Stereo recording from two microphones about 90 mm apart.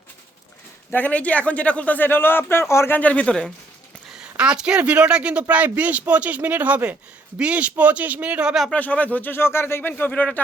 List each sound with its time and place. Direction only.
0.9 s a man's voice: 15° left (ahead or behind)
4.2 s speech: 10° right (ahead or behind)
8.7 s speech: 15° left (ahead or behind)